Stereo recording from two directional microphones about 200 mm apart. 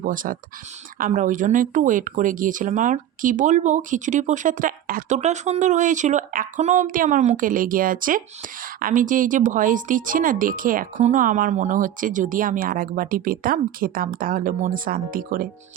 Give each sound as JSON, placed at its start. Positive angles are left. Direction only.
{"t": 0.0, "sound": "speech", "side_deg": -45}